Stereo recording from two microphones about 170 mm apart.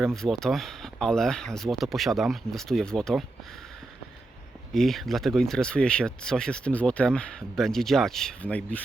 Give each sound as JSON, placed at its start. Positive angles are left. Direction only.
{"t": 0.0, "sound": "speech", "side_deg": 0}
{"t": 4.7, "sound": "speech", "side_deg": 0}